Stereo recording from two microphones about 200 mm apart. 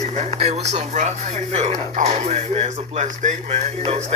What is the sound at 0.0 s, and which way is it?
Speech, 35° right (ahead or behind).